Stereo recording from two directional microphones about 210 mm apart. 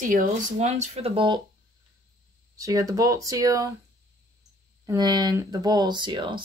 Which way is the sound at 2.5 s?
15° right (ahead or behind).